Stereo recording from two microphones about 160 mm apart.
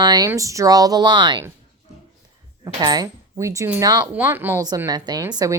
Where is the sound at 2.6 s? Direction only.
25° right (ahead or behind).